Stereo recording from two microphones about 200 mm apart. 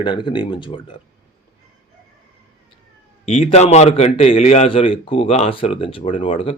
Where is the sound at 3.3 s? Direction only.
35° left (ahead or behind).